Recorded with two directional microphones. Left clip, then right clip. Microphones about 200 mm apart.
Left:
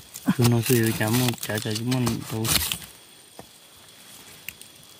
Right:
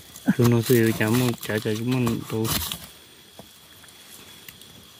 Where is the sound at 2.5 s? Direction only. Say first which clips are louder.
Left 4 dB; 20° left (ahead or behind).